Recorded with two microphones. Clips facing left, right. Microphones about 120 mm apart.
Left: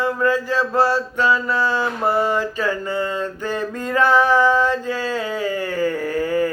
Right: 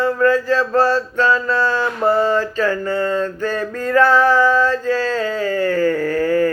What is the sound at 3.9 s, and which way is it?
Male singing, 15° left (ahead or behind).